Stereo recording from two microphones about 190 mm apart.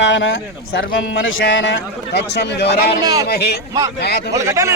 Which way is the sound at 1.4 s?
65° left (ahead or behind).